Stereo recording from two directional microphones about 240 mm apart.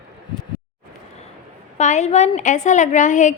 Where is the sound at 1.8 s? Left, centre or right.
Left.